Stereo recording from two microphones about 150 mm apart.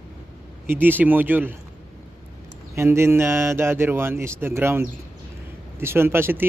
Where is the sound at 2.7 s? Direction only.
15° right (ahead or behind).